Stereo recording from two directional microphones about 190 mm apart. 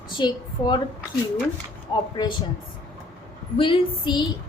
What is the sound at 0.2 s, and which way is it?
Speech, 20° left (ahead or behind).